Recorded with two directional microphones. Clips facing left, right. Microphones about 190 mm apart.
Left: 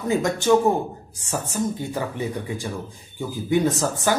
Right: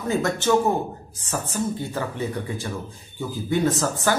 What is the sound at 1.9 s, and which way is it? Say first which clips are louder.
Speech: left 1 dB; 15° left (ahead or behind).